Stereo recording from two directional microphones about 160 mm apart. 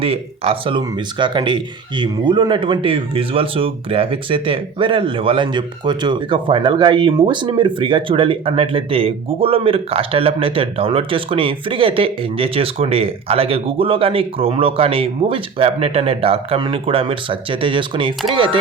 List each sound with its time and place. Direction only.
0.0 s speech: 35° right (ahead or behind)